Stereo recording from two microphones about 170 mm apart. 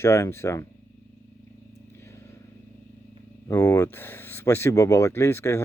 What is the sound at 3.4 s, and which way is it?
Speech, 15° left (ahead or behind).